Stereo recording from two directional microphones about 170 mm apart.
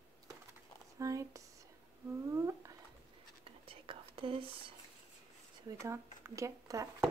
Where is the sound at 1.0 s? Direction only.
20° right (ahead or behind).